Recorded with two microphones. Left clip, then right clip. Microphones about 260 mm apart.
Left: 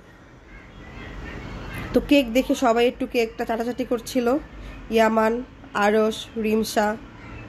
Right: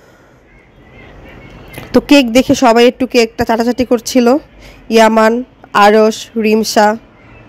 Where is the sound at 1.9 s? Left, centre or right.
Right.